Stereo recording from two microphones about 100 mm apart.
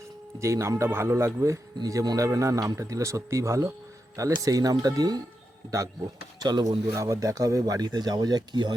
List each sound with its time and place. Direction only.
0.3 s a man's voice: 30° right (ahead or behind)
6.4 s a man's voice: 45° right (ahead or behind)